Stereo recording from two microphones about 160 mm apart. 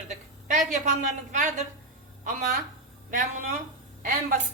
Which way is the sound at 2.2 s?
65° right (ahead or behind).